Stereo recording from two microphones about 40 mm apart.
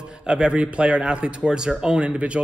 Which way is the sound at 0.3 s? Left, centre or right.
Right.